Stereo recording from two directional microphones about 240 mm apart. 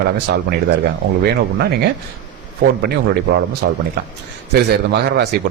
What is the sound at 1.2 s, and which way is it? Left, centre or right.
Speech, right.